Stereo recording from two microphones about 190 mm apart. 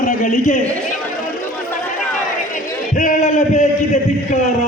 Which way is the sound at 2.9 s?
45° left (ahead or behind).